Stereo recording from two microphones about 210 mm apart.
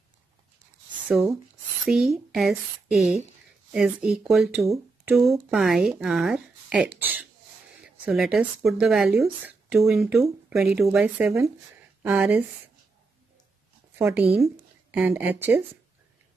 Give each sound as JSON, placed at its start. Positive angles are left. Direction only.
{"t": 1.0, "sound": "speech", "side_deg": -5}
{"t": 13.9, "sound": "speech", "side_deg": -10}